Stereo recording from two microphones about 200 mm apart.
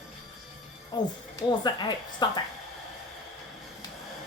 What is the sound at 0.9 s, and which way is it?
A woman's voice, 20° left (ahead or behind).